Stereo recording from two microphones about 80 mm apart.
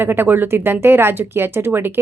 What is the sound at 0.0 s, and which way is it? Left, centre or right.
A woman's voice, right.